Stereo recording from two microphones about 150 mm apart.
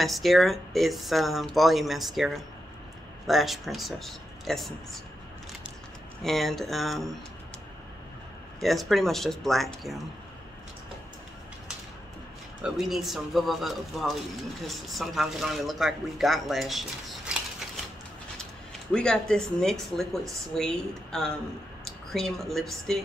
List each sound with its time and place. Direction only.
0.0 s speech: centre (ahead or behind)
6.2 s speech: centre (ahead or behind)
8.5 s speech: centre (ahead or behind)
12.6 s speech: centre (ahead or behind)
17.3 s scissors: 5° right (ahead or behind)
18.9 s speech: 5° left (ahead or behind)